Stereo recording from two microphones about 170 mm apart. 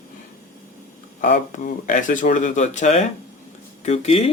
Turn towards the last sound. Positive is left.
turn(degrees=35)  # may be behind; listen again after turning